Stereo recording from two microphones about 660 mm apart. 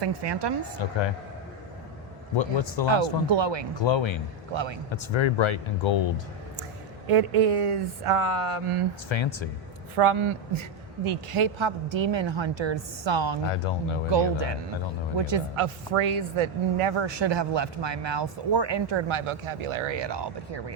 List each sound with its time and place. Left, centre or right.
0.0 s a woman's voice: right
0.8 s a woman's voice: left
2.3 s speech: left
3.2 s a woman's voice: right
3.8 s a woman's voice: left
4.5 s a woman's voice: right
4.9 s speech: left
7.1 s speech: right
9.0 s speech: left
10.0 s a woman's voice: right
13.5 s speech: left
14.1 s a woman's voice: right